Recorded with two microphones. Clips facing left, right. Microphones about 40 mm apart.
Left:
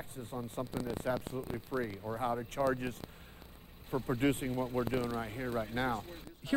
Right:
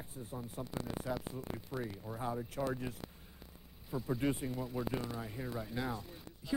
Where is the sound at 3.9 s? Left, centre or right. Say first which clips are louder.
Left 4 dB; left.